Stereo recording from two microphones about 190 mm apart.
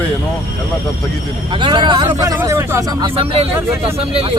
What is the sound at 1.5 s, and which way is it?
Speech, 25° right (ahead or behind).